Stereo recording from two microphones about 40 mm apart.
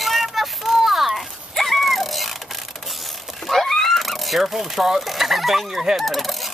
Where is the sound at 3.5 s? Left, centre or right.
Centre.